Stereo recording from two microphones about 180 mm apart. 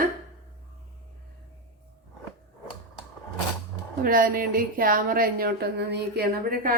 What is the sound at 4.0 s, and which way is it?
Speech, 50° right (ahead or behind).